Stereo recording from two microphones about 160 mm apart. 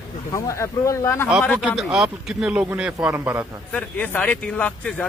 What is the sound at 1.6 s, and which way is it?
A man's voice, 5° right (ahead or behind).